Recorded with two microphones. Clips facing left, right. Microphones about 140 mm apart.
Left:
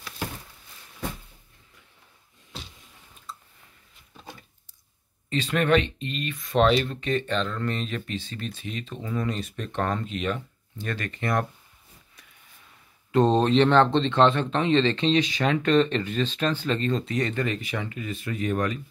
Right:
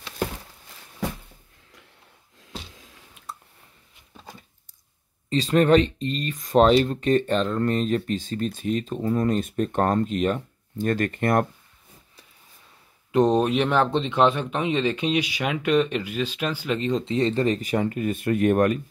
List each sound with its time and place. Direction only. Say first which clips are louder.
5.3 s speech: right 5 dB; 35° right (ahead or behind); by 11.4 s 50° right (ahead or behind)
13.1 s speech: even; 15° right (ahead or behind); by 18.8 s 55° right (ahead or behind)